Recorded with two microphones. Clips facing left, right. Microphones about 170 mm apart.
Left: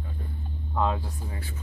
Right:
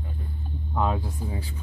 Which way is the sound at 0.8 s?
15° right (ahead or behind).